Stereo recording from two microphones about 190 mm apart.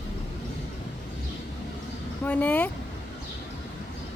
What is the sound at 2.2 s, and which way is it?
Speech, 10° left (ahead or behind).